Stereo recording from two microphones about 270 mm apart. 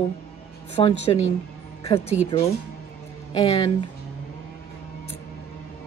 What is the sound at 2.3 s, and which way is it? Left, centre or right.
A woman's voice, centre.